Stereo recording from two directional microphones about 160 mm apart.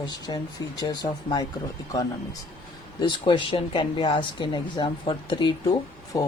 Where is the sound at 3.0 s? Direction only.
30° left (ahead or behind).